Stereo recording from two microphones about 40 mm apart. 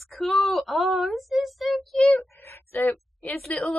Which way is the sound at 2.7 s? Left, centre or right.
Left.